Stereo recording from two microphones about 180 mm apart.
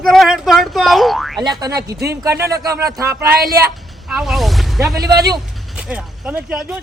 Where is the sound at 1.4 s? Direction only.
20° right (ahead or behind).